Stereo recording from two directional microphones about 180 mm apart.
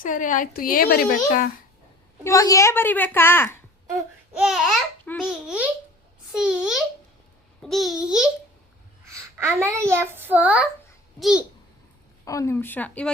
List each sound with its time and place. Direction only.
0.0 s a woman's voice: 45° left (ahead or behind)
2.2 s a woman's voice: 20° left (ahead or behind)
4.4 s babbling: centre (ahead or behind)
9.0 s a child's voice: 15° right (ahead or behind)
11.2 s babbling: 5° right (ahead or behind)
12.2 s a woman's voice: 20° left (ahead or behind)